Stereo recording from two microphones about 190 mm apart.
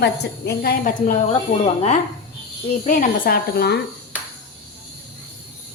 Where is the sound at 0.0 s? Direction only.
60° left (ahead or behind).